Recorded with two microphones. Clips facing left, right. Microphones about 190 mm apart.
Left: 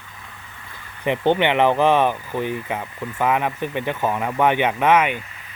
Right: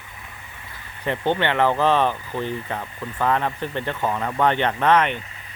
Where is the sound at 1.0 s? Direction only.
15° left (ahead or behind).